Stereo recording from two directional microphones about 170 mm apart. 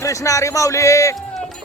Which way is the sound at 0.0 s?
20° left (ahead or behind).